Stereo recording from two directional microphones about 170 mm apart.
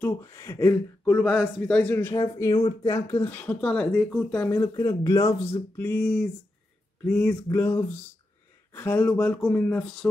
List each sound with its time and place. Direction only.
0.0 s speech: 15° left (ahead or behind)
1.2 s a man's voice: centre (ahead or behind)
1.8 s speech: 10° left (ahead or behind)
5.8 s a man's voice: 10° left (ahead or behind)
8.7 s speech: 10° left (ahead or behind)